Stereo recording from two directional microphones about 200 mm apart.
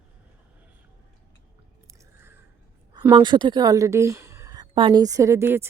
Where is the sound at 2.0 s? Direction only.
10° right (ahead or behind).